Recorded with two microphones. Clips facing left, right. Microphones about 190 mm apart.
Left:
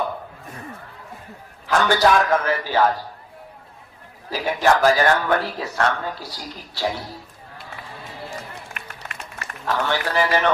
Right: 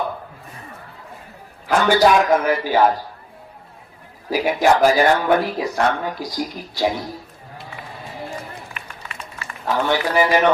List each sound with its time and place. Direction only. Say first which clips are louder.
1.6 s speech: right 3 dB; 10° right (ahead or behind)
4.3 s speech: right 3 dB; 10° right (ahead or behind)
8.7 s music: right 1 dB; 55° left (ahead or behind)
9.6 s speech: right 3 dB; 10° right (ahead or behind)